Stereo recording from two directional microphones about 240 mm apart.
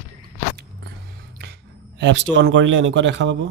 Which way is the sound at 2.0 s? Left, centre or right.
Right.